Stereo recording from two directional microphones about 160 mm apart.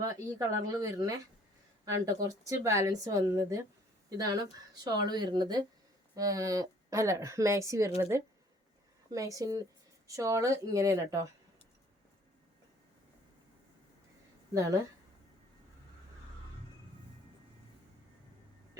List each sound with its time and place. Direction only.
0.0 s speech: 25° right (ahead or behind)
14.5 s speech: 20° right (ahead or behind)